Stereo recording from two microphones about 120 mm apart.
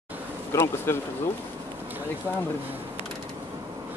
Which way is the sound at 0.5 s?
20° left (ahead or behind).